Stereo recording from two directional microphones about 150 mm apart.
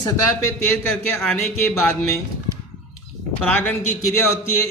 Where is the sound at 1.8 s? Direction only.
15° left (ahead or behind).